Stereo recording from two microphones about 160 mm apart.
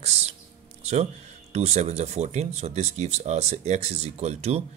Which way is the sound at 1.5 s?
45° right (ahead or behind).